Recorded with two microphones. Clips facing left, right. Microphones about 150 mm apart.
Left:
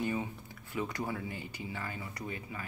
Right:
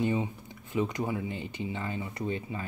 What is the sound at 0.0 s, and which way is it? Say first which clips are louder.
Speech: right 5 dB; 20° right (ahead or behind).